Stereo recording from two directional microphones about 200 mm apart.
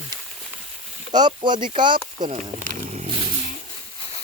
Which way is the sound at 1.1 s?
20° right (ahead or behind).